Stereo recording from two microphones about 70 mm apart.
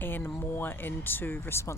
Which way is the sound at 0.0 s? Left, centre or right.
Left.